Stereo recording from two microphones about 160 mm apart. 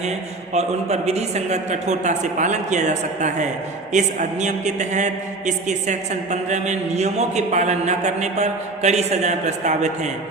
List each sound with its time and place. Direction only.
0.5 s a man's voice: 45° right (ahead or behind)